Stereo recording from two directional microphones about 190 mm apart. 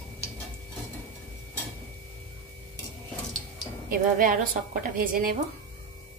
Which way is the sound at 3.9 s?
45° right (ahead or behind).